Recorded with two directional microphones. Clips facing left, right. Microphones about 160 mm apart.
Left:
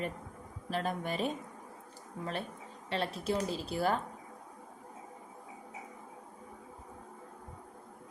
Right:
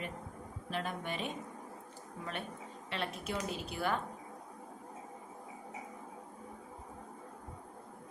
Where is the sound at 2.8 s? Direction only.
35° left (ahead or behind).